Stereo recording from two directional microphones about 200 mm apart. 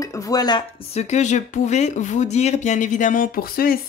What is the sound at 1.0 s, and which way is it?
Speech, 35° left (ahead or behind).